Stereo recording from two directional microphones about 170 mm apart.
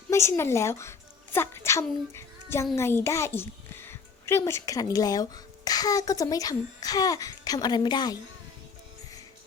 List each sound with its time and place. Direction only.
0.1 s a woman's voice: 15° left (ahead or behind)
2.1 s child singing: 15° left (ahead or behind)
2.7 s a child's voice: 15° left (ahead or behind)